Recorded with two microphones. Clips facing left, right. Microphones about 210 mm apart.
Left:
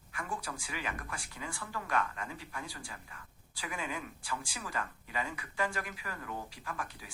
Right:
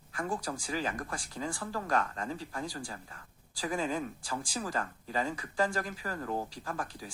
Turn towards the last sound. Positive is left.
turn(degrees=-40)  # may be behind; listen again after turning